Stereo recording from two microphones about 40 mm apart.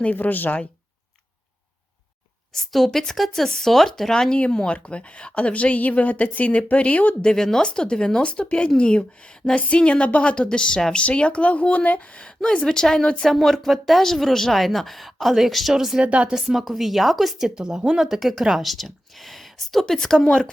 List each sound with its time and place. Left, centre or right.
0.0 s speech: left
2.5 s speech: centre
4.5 s a woman's voice: left
7.2 s speech: centre
11.0 s speech: left
13.2 s a woman's voice: centre
16.0 s speech: right
16.3 s a woman's voice: centre
17.5 s speech: centre
18.0 s speech: centre
18.6 s speech: centre